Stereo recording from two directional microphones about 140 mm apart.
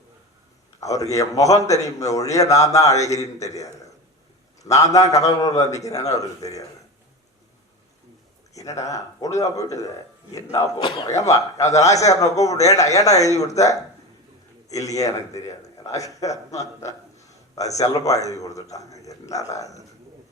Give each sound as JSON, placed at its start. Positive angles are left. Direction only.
{"t": 1.1, "sound": "a man's voice", "side_deg": 25}
{"t": 4.7, "sound": "a man's voice", "side_deg": 25}
{"t": 8.5, "sound": "a man's voice", "side_deg": 25}
{"t": 10.8, "sound": "a man's voice", "side_deg": 35}
{"t": 11.1, "sound": "a man's voice", "side_deg": 25}
{"t": 14.9, "sound": "a man's voice", "side_deg": 25}
{"t": 17.2, "sound": "a sound", "side_deg": 25}
{"t": 17.7, "sound": "a man's voice", "side_deg": 25}